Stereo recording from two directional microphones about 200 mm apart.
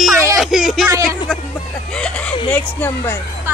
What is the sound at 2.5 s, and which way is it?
Speech, 10° left (ahead or behind).